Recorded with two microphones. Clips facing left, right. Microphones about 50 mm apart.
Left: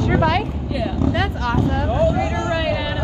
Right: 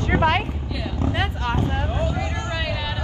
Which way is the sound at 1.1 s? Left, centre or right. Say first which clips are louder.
Left 4 dB; right.